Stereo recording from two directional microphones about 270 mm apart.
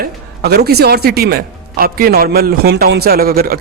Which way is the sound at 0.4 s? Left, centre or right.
Right.